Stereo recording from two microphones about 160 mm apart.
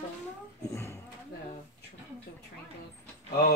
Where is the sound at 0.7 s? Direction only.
15° left (ahead or behind).